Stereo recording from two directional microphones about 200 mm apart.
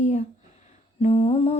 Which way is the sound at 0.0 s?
35° left (ahead or behind).